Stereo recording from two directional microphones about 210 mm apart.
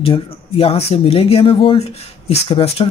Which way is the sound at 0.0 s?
25° left (ahead or behind).